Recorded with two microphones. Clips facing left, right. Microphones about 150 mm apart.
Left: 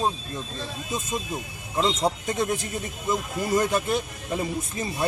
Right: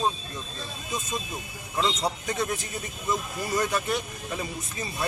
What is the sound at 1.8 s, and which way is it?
Speech, 25° left (ahead or behind).